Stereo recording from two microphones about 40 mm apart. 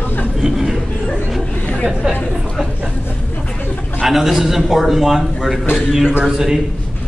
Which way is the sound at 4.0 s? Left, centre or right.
Centre.